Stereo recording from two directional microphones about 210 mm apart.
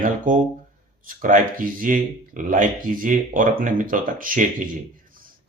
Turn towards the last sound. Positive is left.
turn(degrees=-40)  # may be behind; listen again after turning